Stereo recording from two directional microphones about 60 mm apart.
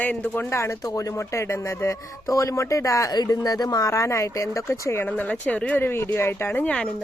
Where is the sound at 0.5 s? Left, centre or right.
Left.